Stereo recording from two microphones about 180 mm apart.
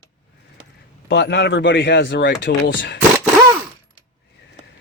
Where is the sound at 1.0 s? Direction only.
75° left (ahead or behind).